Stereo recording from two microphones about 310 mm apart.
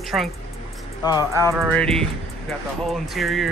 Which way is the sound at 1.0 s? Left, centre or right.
Centre.